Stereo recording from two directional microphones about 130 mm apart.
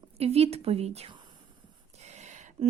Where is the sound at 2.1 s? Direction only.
65° right (ahead or behind).